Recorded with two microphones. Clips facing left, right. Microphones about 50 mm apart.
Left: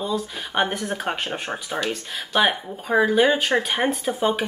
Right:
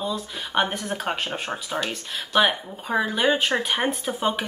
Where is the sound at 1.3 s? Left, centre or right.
Centre.